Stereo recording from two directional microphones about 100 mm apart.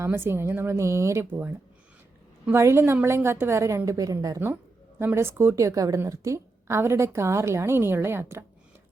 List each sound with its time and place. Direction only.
0.0 s a woman's voice: 25° right (ahead or behind)
4.9 s a woman's voice: 25° right (ahead or behind)